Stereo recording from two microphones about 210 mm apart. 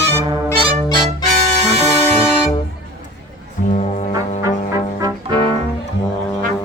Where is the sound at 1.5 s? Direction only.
30° right (ahead or behind).